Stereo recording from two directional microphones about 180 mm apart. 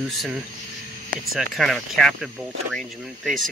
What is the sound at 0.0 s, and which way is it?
Speech, centre (ahead or behind).